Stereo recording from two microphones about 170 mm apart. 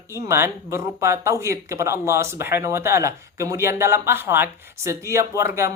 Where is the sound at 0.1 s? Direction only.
15° right (ahead or behind).